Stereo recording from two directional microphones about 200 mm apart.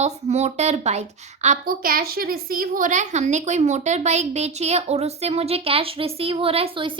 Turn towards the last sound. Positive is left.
turn(degrees=-25)  # may be behind; listen again after turning